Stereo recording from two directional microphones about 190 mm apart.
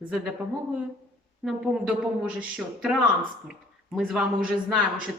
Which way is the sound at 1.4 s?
5° right (ahead or behind).